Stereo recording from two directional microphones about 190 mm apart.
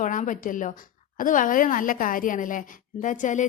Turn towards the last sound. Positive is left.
turn(degrees=40)  # may be behind; listen again after turning